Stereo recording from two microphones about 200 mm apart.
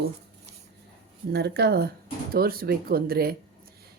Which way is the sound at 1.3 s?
55° right (ahead or behind).